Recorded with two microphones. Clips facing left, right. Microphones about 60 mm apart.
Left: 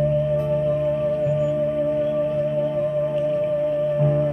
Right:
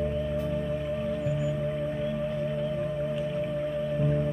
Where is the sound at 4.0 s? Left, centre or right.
Left.